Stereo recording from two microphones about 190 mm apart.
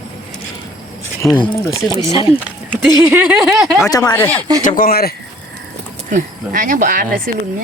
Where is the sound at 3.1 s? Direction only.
5° right (ahead or behind).